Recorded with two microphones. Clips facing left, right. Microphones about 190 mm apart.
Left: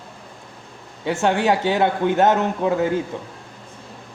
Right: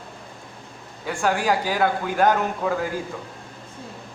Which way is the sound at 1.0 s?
25° left (ahead or behind).